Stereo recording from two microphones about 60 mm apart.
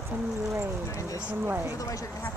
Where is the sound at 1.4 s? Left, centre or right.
Right.